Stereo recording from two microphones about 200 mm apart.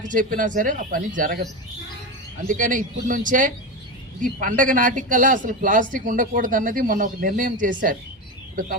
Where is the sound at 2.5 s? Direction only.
40° right (ahead or behind).